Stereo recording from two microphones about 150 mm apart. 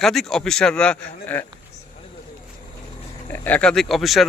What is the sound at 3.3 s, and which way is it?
A man's voice, 10° left (ahead or behind).